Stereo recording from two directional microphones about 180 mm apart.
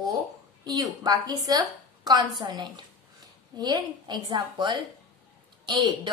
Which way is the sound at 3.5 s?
20° right (ahead or behind).